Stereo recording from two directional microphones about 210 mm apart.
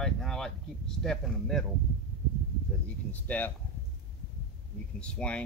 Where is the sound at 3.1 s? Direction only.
10° left (ahead or behind).